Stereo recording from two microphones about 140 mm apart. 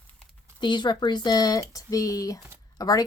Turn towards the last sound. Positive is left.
turn(degrees=25)  # may be behind; listen again after turning